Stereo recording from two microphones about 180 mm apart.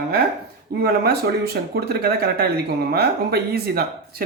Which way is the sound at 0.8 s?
60° right (ahead or behind).